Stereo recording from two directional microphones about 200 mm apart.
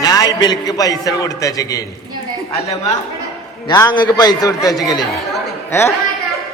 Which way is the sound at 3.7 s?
20° left (ahead or behind).